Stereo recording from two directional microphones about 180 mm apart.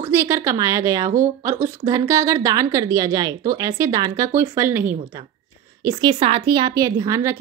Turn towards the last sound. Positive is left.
turn(degrees=-15)  # may be behind; listen again after turning